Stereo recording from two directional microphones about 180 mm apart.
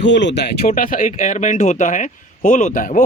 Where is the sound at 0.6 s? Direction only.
50° left (ahead or behind).